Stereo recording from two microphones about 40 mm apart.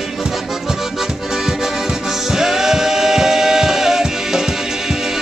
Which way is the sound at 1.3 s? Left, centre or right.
Centre.